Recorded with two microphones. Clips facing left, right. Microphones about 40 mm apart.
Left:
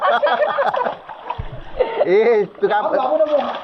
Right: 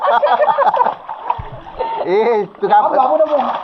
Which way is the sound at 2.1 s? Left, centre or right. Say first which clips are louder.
Right 1 dB; right.